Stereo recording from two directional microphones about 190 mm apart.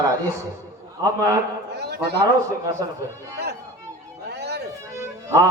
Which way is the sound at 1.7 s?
60° right (ahead or behind).